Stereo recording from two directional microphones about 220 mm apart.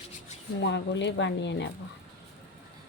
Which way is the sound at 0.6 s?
55° left (ahead or behind).